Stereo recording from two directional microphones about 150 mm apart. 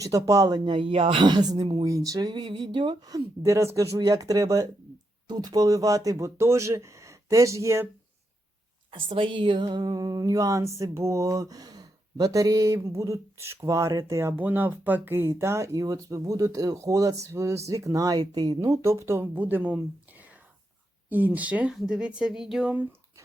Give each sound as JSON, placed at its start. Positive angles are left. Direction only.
{"t": 0.0, "sound": "mantra", "side_deg": -20}
{"t": 8.9, "sound": "a woman's voice", "side_deg": -35}
{"t": 9.6, "sound": "mantra", "side_deg": -25}
{"t": 21.1, "sound": "speech", "side_deg": -10}